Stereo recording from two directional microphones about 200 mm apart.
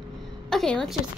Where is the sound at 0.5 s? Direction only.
Centre (ahead or behind).